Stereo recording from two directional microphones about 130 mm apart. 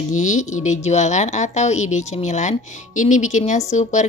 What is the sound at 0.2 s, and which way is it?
A woman's voice, 70° left (ahead or behind).